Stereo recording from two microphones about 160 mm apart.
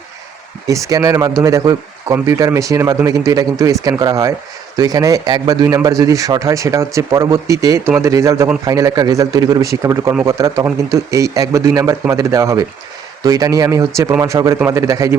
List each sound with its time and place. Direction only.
0.7 s a man's voice: 20° right (ahead or behind)